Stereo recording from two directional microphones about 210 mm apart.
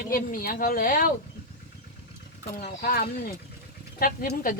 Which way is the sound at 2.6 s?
45° left (ahead or behind).